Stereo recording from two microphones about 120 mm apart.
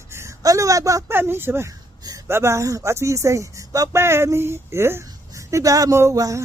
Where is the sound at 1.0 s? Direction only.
15° right (ahead or behind).